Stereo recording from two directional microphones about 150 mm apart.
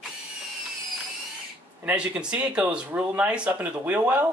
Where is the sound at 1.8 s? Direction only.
10° right (ahead or behind).